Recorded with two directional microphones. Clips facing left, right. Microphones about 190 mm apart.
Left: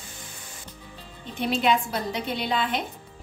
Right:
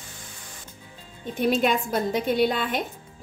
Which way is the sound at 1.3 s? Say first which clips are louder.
Right 2 dB; 50° right (ahead or behind).